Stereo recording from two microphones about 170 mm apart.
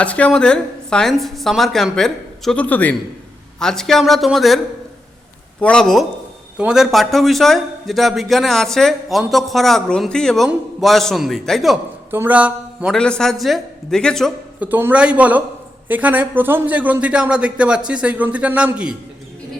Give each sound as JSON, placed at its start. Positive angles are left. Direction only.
{"t": 0.0, "sound": "a man's voice", "side_deg": 5}
{"t": 12.1, "sound": "a sound", "side_deg": -10}
{"t": 13.0, "sound": "a man's voice", "side_deg": 5}
{"t": 14.6, "sound": "a man's voice", "side_deg": -10}